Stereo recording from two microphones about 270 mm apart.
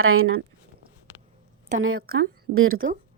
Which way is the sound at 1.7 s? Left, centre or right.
Right.